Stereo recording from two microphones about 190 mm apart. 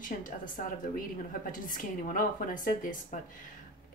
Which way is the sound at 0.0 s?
45° left (ahead or behind).